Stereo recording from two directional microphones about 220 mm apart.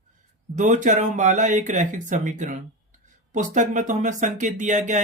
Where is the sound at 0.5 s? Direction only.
35° right (ahead or behind).